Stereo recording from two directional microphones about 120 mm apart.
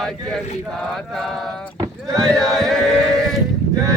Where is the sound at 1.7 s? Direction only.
35° right (ahead or behind).